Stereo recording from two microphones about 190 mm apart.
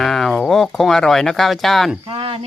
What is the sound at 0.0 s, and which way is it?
Speech, centre (ahead or behind).